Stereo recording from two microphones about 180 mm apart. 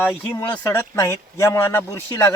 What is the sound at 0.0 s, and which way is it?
Speech, 10° left (ahead or behind).